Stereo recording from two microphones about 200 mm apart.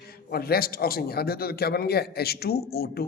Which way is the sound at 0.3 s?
50° left (ahead or behind).